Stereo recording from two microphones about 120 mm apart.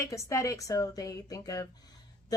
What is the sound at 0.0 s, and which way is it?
A woman's voice, 25° left (ahead or behind).